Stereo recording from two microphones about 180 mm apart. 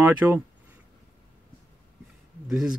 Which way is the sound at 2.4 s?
5° right (ahead or behind).